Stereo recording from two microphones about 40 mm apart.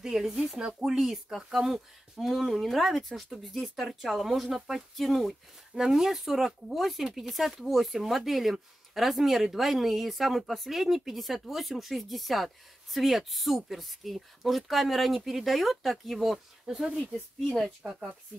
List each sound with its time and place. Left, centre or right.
0.0 s speech: centre
0.7 s speech: centre
17.5 s speech: centre